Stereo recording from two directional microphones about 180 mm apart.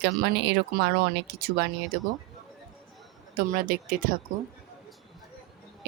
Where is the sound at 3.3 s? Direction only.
55° right (ahead or behind).